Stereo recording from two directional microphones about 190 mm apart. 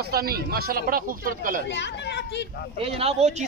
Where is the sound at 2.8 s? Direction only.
30° right (ahead or behind).